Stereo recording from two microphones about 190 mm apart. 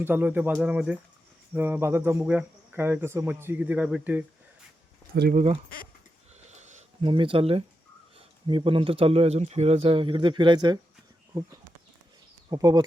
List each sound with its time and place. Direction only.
0.0 s speech: 10° right (ahead or behind)
5.3 s speech: 40° right (ahead or behind)
6.3 s a sound: 35° right (ahead or behind)
8.1 s speech: 25° right (ahead or behind)
12.5 s speech: 20° right (ahead or behind)